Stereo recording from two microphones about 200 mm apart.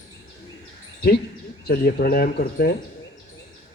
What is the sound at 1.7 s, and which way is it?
A man's voice, 50° left (ahead or behind).